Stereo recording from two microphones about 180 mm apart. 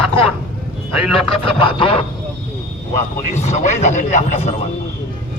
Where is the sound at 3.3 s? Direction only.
40° left (ahead or behind).